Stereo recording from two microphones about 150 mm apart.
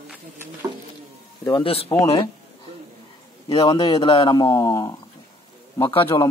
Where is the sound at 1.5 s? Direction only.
35° left (ahead or behind).